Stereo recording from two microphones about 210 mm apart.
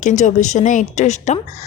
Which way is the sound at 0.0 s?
35° left (ahead or behind).